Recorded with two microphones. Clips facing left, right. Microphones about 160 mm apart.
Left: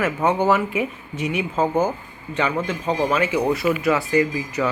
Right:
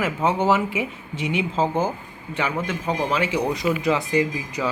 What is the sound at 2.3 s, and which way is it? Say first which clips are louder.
Speech: left 3 dB; 10° right (ahead or behind).